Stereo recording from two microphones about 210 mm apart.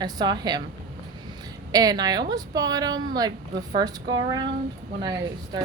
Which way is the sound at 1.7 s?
20° right (ahead or behind).